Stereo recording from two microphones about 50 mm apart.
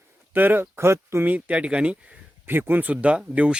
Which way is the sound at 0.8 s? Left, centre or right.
Right.